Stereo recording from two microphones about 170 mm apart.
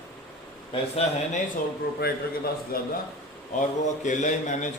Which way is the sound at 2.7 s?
60° left (ahead or behind).